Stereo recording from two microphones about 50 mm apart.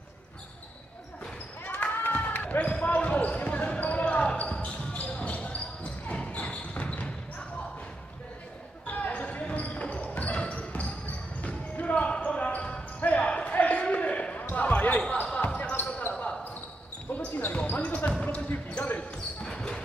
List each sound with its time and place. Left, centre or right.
1.8 s basketball bounce: left
8.8 s basketball bounce: left
10.4 s music: left
11.4 s basketball bounce: left
15.7 s basketball bounce: left
16.1 s basketball bounce: centre
17.1 s basketball bounce: left
18.9 s basketball bounce: centre